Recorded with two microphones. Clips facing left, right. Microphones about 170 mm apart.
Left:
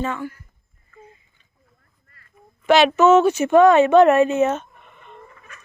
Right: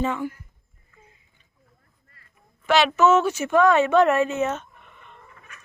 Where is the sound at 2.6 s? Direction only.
20° left (ahead or behind).